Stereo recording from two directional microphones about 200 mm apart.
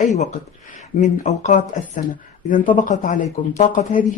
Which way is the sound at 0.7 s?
40° left (ahead or behind).